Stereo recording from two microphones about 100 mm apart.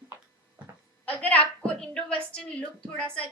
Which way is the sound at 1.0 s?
15° left (ahead or behind).